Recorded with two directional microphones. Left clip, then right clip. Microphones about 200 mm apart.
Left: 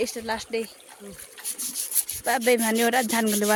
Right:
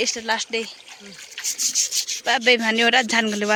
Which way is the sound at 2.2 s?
5° left (ahead or behind).